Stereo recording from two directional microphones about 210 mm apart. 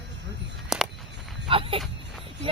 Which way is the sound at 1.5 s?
25° right (ahead or behind).